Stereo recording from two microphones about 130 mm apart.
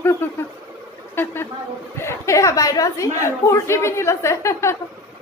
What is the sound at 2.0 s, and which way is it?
A woman's voice, 20° left (ahead or behind).